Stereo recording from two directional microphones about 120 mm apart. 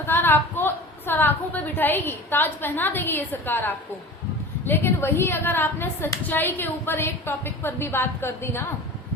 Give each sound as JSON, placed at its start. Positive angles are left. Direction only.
{"t": 0.0, "sound": "a woman's voice", "side_deg": 20}